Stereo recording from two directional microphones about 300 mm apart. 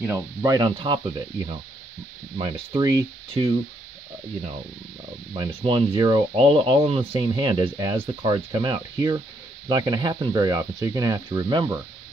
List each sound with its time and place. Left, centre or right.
0.0 s speech: centre
5.3 s speech: centre